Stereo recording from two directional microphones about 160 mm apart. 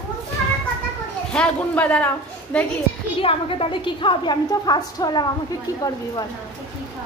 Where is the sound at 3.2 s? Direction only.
35° left (ahead or behind).